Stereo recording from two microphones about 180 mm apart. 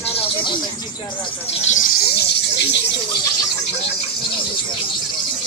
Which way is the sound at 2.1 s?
70° left (ahead or behind).